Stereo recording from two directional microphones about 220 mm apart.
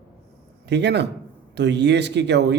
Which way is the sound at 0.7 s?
50° right (ahead or behind).